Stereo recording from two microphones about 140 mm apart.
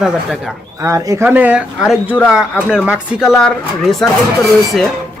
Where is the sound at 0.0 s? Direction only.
Centre (ahead or behind).